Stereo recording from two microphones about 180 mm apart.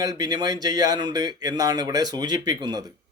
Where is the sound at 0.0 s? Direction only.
20° right (ahead or behind).